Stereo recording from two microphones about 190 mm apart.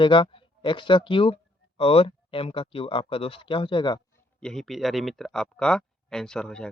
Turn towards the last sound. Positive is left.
turn(degrees=5)  # may be behind; listen again after turning